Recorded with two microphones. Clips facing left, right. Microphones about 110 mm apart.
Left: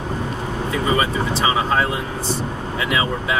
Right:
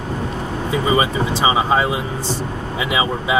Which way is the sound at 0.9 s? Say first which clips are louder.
Right 2 dB; 15° right (ahead or behind).